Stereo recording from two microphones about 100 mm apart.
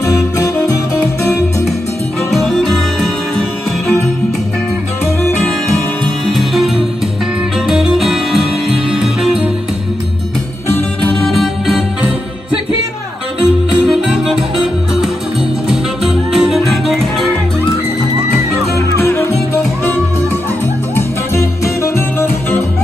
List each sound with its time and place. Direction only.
2.3 s music: centre (ahead or behind)
6.3 s music: centre (ahead or behind)
11.2 s music: centre (ahead or behind)
13.8 s music: 5° right (ahead or behind)
15.7 s music: 5° right (ahead or behind)
18.8 s music: 25° left (ahead or behind)
20.9 s music: 30° left (ahead or behind)